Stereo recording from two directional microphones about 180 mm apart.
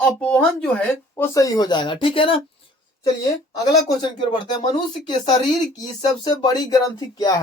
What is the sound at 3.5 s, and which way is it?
Speech, 20° left (ahead or behind).